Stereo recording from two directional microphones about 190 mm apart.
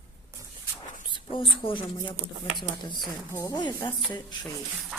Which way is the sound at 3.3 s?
15° left (ahead or behind).